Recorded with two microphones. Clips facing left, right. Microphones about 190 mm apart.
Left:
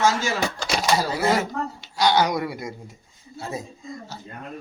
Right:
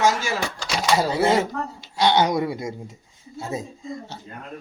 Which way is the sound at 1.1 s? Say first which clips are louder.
Right 2 dB; 25° right (ahead or behind).